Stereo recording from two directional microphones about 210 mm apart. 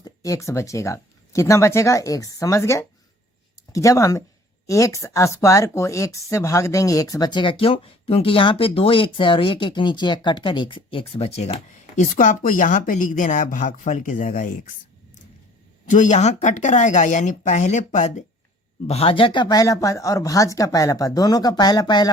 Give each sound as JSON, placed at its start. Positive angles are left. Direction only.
{"t": 0.0, "sound": "a woman's voice", "side_deg": 15}
{"t": 15.9, "sound": "speech", "side_deg": 35}